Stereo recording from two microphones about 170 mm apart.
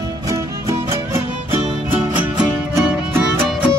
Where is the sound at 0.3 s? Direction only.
15° right (ahead or behind).